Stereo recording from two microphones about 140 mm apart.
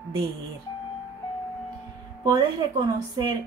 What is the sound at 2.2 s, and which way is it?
Speech, 30° right (ahead or behind).